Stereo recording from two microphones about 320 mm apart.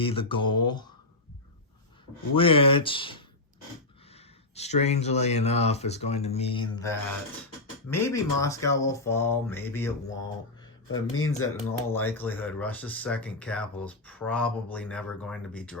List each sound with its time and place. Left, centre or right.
0.0 s speech: centre
0.4 s speech: left
0.7 s speech: centre
2.3 s speech: centre
10.8 s speech: left
11.3 s speech: centre